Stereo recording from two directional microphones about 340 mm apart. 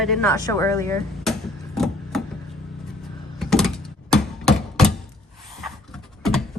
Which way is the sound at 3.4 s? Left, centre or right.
Centre.